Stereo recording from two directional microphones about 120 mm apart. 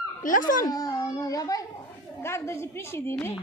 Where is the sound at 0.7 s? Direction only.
30° left (ahead or behind).